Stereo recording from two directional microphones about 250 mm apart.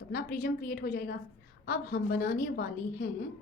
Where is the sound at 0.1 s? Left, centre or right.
Left.